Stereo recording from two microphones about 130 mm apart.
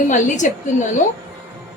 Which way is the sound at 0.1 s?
70° left (ahead or behind).